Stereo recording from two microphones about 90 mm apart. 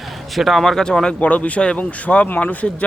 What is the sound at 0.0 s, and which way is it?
A man's voice, centre (ahead or behind).